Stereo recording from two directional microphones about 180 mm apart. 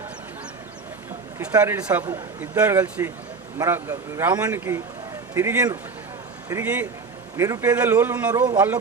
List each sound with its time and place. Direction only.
1.6 s a man's voice: 10° right (ahead or behind)